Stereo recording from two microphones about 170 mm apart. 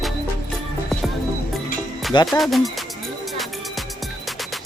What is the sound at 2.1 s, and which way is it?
Speech, 25° left (ahead or behind).